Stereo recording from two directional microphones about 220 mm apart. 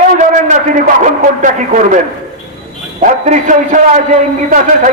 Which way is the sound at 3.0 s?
35° right (ahead or behind).